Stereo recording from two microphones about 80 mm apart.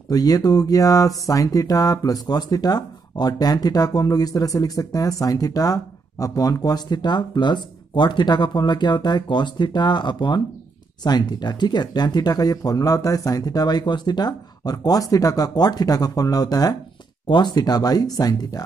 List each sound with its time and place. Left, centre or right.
0.1 s speech: left
11.1 s speech: left
17.3 s speech: left